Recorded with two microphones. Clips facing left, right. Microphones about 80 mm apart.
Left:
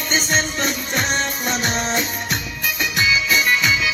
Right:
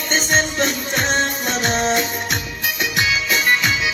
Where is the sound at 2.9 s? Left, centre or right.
Right.